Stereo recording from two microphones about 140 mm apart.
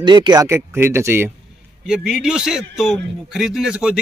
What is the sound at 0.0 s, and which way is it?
Speech, 30° right (ahead or behind).